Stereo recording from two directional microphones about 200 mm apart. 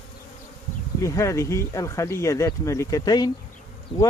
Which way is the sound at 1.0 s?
15° left (ahead or behind).